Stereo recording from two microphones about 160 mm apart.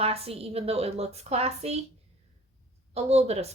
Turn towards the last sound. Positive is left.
turn(degrees=-40)  # may be behind; listen again after turning